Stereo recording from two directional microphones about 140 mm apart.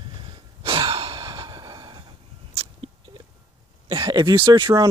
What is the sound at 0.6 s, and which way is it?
Gasp, 40° right (ahead or behind).